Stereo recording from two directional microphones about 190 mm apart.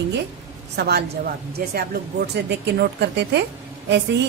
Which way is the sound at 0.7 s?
60° right (ahead or behind).